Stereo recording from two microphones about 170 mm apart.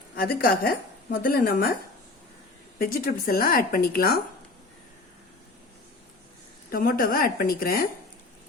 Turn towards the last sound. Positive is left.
turn(degrees=60)  # may be behind; listen again after turning